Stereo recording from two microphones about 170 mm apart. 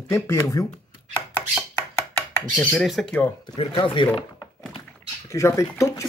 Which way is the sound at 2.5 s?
5° left (ahead or behind).